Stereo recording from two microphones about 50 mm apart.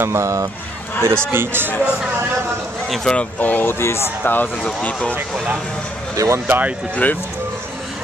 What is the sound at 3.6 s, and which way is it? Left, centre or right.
Speech, left.